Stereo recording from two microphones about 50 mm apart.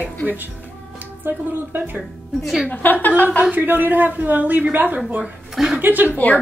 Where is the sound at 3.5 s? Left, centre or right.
Right.